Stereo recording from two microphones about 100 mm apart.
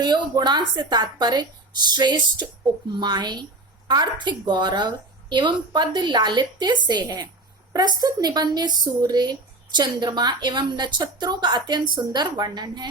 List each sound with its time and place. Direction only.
0.0 s speech: 45° right (ahead or behind)